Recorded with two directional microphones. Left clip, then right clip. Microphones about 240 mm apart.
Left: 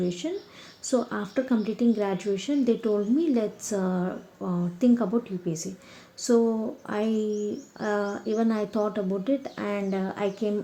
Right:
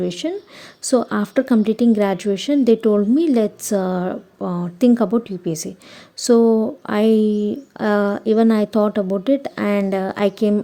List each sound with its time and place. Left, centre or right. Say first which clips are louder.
0.0 s a woman's voice: right 7 dB; right